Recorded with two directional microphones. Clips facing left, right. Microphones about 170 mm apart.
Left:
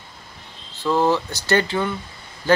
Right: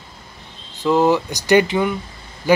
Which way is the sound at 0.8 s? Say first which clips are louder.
Right 4 dB; 15° right (ahead or behind).